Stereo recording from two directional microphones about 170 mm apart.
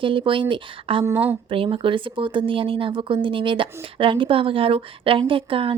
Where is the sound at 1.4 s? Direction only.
30° right (ahead or behind).